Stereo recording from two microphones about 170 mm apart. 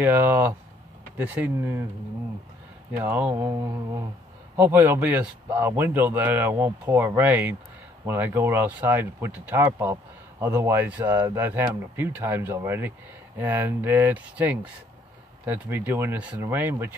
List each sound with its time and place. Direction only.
0.0 s speech: 10° right (ahead or behind)
3.0 s speech: 10° right (ahead or behind)